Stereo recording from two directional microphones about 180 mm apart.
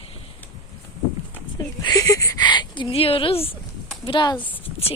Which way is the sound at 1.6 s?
20° left (ahead or behind).